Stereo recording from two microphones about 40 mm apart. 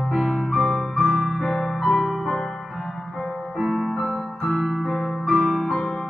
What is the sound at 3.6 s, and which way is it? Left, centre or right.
Music, centre.